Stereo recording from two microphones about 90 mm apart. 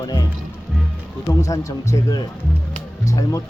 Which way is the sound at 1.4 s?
40° left (ahead or behind).